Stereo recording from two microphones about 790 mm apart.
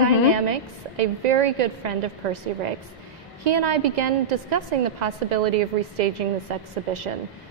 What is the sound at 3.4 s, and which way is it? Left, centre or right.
A woman's voice, right.